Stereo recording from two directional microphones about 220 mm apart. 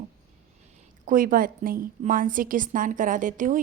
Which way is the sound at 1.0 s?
40° right (ahead or behind).